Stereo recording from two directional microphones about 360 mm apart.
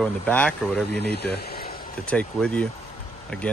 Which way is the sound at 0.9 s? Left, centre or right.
Left.